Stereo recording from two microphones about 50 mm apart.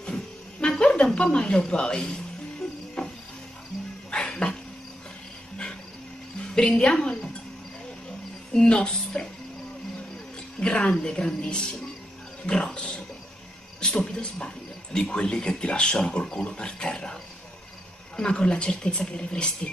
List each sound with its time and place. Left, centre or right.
0.6 s speech: centre
3.0 s cricket: centre
4.1 s a sound: centre
6.8 s a woman's voice: centre
8.5 s a woman's voice: centre
10.6 s a woman's voice: centre